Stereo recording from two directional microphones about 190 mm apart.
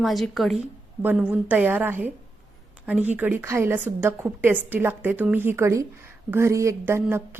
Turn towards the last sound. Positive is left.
turn(degrees=-15)  # may be behind; listen again after turning